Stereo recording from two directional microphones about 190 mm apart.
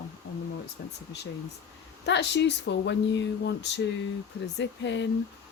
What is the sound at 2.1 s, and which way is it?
Speech, 65° left (ahead or behind).